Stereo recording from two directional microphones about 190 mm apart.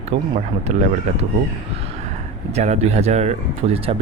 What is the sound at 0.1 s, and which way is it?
Speech, 30° right (ahead or behind).